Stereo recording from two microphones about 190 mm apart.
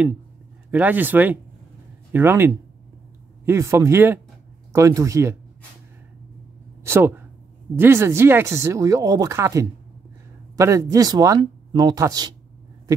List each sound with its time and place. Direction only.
0.7 s speech: 10° right (ahead or behind)
6.8 s speech: 10° right (ahead or behind)